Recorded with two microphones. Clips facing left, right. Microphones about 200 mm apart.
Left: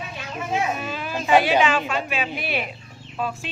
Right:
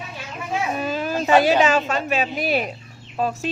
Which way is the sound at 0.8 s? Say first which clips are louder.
Right 5 dB; 40° right (ahead or behind).